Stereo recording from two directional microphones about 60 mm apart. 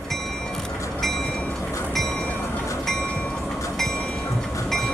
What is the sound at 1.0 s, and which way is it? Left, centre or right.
Train, centre.